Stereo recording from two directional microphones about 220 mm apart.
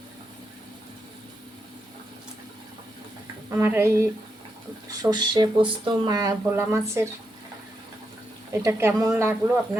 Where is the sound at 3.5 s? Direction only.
10° right (ahead or behind).